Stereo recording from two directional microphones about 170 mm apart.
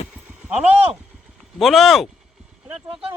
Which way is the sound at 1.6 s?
Centre (ahead or behind).